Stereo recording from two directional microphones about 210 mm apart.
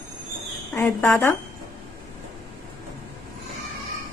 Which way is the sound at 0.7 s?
10° left (ahead or behind).